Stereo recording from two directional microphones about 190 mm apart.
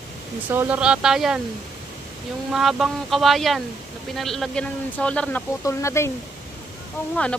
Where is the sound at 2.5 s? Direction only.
Centre (ahead or behind); by 6.1 s 15° left (ahead or behind).